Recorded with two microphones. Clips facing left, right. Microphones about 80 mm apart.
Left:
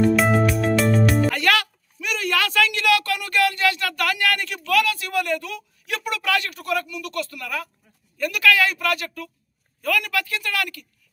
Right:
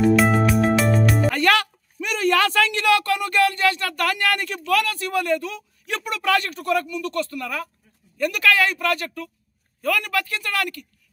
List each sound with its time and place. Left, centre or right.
0.0 s music: centre
1.3 s a woman's voice: right
5.2 s a man's voice: right